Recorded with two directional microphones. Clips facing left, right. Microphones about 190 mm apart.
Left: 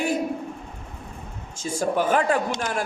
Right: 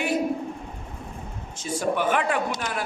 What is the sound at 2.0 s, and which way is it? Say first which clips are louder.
Speech: left 5 dB; 40° left (ahead or behind).